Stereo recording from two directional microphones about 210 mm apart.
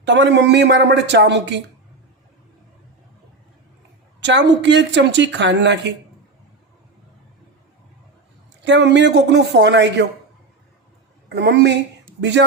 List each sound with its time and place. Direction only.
0.0 s speech: 60° right (ahead or behind)
4.2 s speech: 60° right (ahead or behind)
8.6 s speech: 55° right (ahead or behind)
11.3 s speech: 55° right (ahead or behind)